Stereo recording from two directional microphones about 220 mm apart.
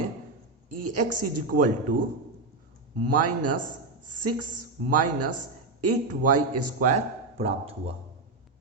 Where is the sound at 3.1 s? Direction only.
90° right.